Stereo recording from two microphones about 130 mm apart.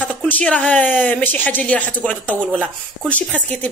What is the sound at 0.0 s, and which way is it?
Speech, 10° left (ahead or behind).